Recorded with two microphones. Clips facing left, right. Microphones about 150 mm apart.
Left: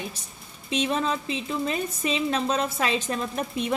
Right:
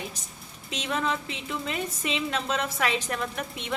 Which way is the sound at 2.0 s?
35° left (ahead or behind).